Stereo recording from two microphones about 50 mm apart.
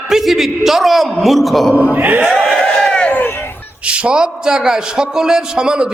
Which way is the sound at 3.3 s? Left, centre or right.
Left.